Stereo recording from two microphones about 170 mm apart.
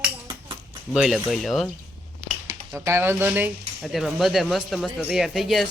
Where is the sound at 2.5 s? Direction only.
15° right (ahead or behind).